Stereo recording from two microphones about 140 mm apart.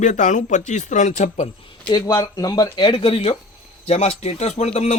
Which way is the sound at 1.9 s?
30° left (ahead or behind).